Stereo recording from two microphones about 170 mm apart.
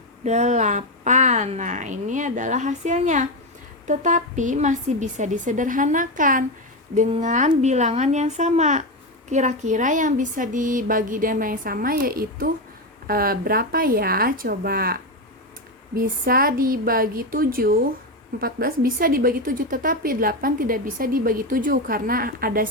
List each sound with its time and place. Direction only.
0.3 s a woman's voice: 40° right (ahead or behind); by 22.7 s 60° right (ahead or behind)